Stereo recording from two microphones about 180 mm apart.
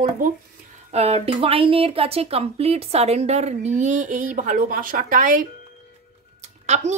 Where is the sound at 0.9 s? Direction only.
35° right (ahead or behind).